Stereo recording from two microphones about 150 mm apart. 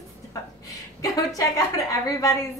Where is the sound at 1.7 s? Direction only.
25° left (ahead or behind).